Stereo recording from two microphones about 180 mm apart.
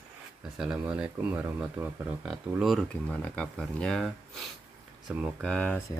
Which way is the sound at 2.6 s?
5° left (ahead or behind).